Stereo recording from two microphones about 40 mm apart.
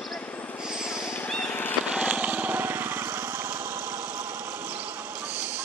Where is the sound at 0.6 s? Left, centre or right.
Centre.